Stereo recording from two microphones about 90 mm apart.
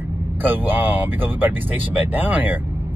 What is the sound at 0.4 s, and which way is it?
Speech, 20° right (ahead or behind).